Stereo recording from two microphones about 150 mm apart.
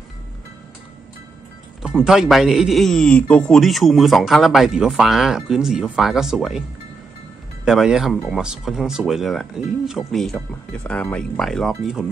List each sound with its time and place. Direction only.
2.0 s a man's voice: 5° right (ahead or behind)
7.6 s a man's voice: 5° right (ahead or behind)